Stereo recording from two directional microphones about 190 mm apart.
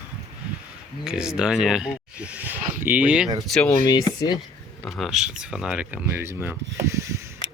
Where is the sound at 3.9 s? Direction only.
20° left (ahead or behind).